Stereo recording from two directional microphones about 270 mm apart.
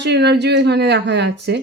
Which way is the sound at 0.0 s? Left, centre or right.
Right.